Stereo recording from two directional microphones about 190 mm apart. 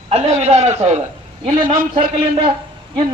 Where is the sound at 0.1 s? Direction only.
35° right (ahead or behind).